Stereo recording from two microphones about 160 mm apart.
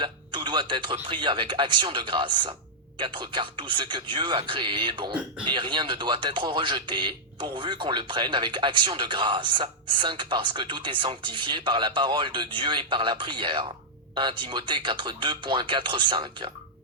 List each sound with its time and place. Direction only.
0.0 s music: 30° right (ahead or behind)
0.9 s speech: 30° right (ahead or behind)